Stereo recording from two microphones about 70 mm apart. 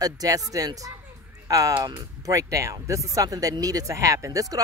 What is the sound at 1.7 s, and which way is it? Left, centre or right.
Speech, right.